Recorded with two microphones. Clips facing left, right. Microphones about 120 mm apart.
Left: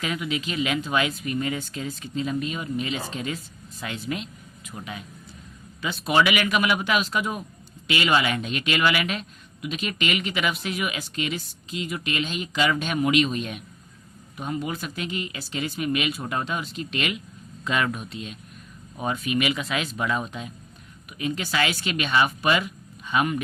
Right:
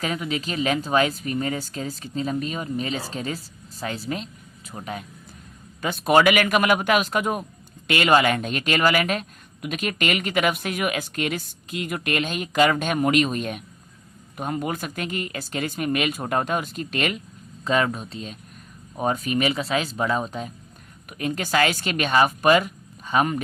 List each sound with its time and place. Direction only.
0.0 s speech: 40° right (ahead or behind)
5.8 s a man's voice: 50° right (ahead or behind)
21.1 s a man's voice: 45° right (ahead or behind)